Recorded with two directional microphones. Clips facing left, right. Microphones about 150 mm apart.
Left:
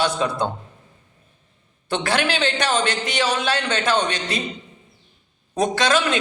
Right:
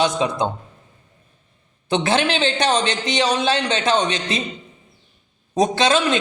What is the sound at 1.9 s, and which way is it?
Speech, 25° right (ahead or behind).